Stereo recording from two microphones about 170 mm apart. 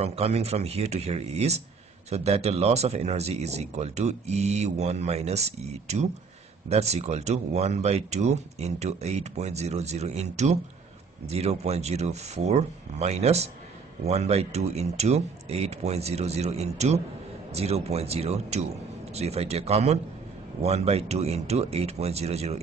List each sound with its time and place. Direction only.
0.0 s speech: 40° right (ahead or behind)